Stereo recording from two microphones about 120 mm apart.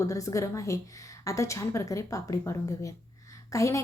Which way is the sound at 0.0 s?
25° left (ahead or behind).